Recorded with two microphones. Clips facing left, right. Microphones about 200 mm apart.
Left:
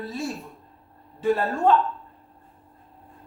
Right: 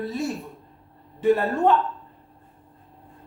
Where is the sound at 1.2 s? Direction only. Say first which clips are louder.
Right 2 dB; 20° right (ahead or behind).